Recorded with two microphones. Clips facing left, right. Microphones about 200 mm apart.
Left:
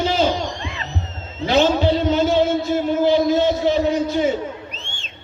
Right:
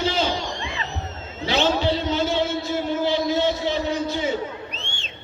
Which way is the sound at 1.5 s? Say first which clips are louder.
Left 5 dB; 50° left (ahead or behind).